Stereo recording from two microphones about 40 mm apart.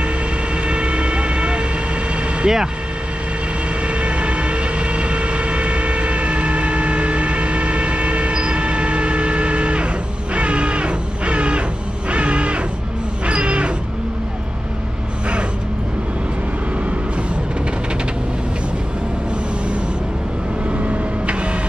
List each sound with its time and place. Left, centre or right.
0.7 s vehicle: right
2.4 s speech: centre
3.8 s vehicle: right
10.3 s music: right
12.1 s crow: right
13.3 s a sound: right
20.7 s vehicle: right